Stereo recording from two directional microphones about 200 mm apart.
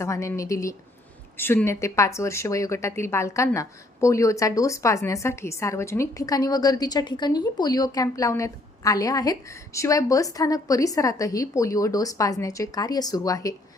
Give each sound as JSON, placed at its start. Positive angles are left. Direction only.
{"t": 0.0, "sound": "a woman's voice", "side_deg": 15}